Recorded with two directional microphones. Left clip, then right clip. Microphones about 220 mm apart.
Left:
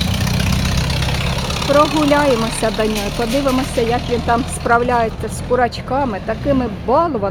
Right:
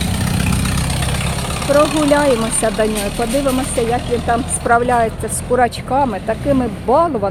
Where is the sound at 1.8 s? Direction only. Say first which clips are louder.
Even; 20° left (ahead or behind).